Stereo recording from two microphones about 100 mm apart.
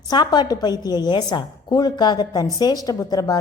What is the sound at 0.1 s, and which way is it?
A woman's voice, 45° left (ahead or behind).